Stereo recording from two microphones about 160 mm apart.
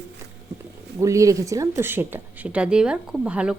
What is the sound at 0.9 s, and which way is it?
Speech, 20° right (ahead or behind).